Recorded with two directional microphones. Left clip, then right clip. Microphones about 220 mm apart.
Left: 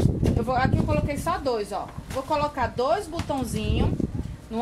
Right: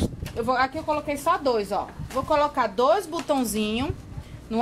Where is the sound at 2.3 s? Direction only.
40° right (ahead or behind).